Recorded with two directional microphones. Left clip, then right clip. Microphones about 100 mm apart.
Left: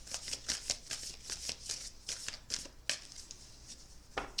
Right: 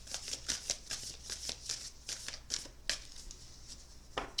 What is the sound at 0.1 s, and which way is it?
Shuffling cards, 15° left (ahead or behind).